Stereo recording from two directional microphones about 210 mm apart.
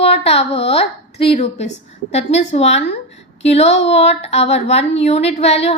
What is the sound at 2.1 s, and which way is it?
Child singing, 30° left (ahead or behind).